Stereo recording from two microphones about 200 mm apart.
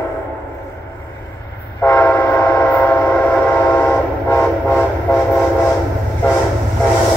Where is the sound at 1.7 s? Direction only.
10° left (ahead or behind).